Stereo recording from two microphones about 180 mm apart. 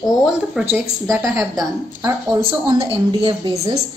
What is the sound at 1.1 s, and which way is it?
Speech, 15° right (ahead or behind).